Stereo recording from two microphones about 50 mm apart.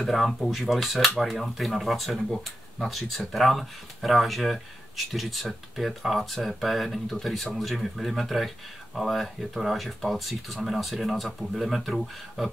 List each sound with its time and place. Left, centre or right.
0.0 s speech: centre